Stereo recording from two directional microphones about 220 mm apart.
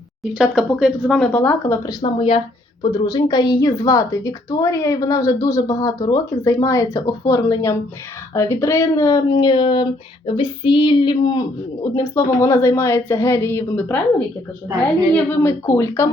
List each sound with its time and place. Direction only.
0.3 s speech: 5° right (ahead or behind)
2.0 s a woman's voice: 25° left (ahead or behind); by 14.0 s 10° left (ahead or behind)
15.1 s speech: 10° left (ahead or behind)